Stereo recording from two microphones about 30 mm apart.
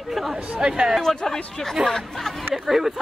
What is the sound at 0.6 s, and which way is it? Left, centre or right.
Speech, right.